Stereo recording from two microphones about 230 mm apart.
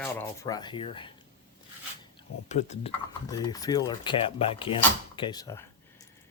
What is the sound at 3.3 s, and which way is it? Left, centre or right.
Speech, centre.